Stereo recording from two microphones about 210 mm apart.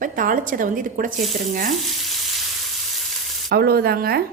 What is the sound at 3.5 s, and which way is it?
Speech, 50° right (ahead or behind).